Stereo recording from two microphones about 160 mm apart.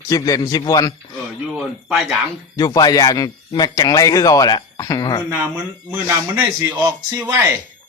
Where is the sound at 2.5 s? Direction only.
25° left (ahead or behind).